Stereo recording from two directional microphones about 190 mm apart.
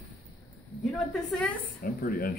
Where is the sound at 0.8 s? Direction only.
Centre (ahead or behind).